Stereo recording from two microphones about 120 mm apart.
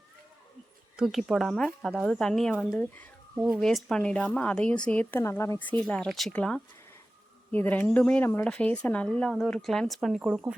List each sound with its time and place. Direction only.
0.9 s speech: centre (ahead or behind)
3.3 s speech: 5° right (ahead or behind); by 5.8 s 20° left (ahead or behind)
6.1 s speech: centre (ahead or behind)
8.2 s speech: 20° left (ahead or behind); by 10.4 s 5° right (ahead or behind)